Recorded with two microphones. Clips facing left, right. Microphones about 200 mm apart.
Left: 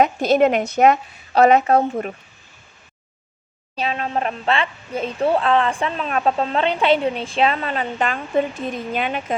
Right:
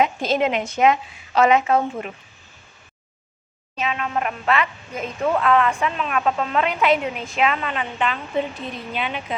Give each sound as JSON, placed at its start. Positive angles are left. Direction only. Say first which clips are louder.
{"t": 0.0, "sound": "a woman's voice", "louder": "left 5 dB", "side_deg": 40}
{"t": 3.8, "sound": "a woman's voice", "louder": "left 2 dB", "side_deg": 35}